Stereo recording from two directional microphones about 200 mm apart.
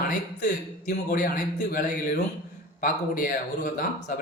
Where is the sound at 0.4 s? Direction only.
45° left (ahead or behind).